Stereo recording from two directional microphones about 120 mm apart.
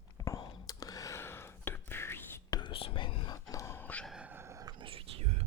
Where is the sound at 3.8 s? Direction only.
10° left (ahead or behind).